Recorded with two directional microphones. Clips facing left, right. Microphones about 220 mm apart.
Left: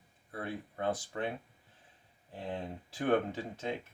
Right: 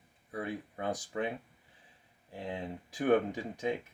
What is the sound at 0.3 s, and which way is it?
Speech, 15° right (ahead or behind).